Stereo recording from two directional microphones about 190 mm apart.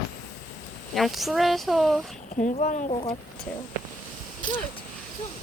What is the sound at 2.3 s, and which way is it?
Speech, 40° left (ahead or behind).